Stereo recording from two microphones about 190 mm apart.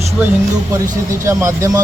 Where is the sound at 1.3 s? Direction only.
15° right (ahead or behind).